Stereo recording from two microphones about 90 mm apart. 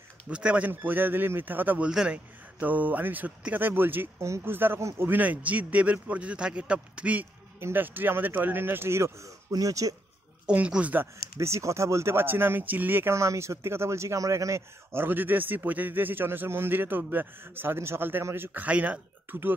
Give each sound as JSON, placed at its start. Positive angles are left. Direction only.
{"t": 0.3, "sound": "speech", "side_deg": -10}
{"t": 1.9, "sound": "a man's voice", "side_deg": -10}
{"t": 9.5, "sound": "speech", "side_deg": -40}
{"t": 10.4, "sound": "a man's voice", "side_deg": -15}
{"t": 11.3, "sound": "speech", "side_deg": -35}